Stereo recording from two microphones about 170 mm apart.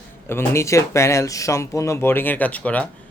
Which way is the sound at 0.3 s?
15° left (ahead or behind).